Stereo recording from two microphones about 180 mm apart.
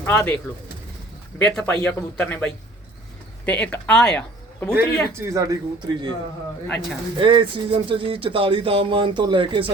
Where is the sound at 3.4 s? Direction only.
10° left (ahead or behind).